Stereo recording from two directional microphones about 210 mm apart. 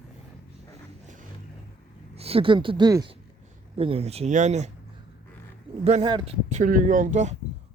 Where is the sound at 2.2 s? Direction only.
30° right (ahead or behind).